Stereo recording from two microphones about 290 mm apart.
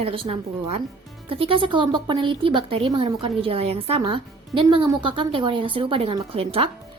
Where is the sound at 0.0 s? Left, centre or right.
Centre.